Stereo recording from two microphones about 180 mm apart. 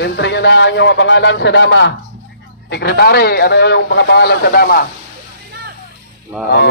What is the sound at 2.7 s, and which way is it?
Speech, 65° left (ahead or behind).